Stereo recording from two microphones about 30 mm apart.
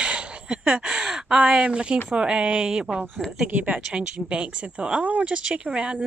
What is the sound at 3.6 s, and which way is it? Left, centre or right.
Speech, right.